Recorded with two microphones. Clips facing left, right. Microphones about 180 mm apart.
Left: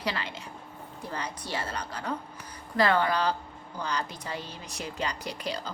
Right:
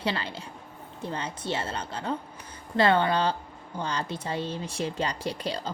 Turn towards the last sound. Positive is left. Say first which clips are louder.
# right 3 dB
turn(degrees=-30)  # may be behind; listen again after turning